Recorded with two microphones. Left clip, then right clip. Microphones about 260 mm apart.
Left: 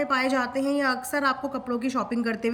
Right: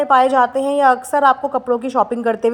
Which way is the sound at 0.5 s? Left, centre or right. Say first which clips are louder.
Right 11 dB; left.